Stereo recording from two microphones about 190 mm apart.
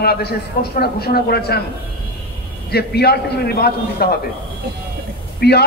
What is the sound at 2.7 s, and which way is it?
Speech, 55° left (ahead or behind).